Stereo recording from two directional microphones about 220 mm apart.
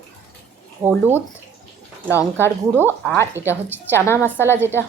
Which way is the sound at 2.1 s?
10° left (ahead or behind).